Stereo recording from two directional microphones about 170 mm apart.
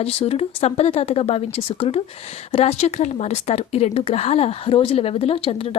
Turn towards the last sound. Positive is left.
turn(degrees=35)  # may be behind; listen again after turning